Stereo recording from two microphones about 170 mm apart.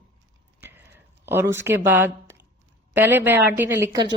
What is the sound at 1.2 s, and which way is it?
Speech, 15° right (ahead or behind).